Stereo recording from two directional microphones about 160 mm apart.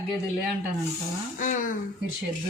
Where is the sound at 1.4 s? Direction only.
55° left (ahead or behind).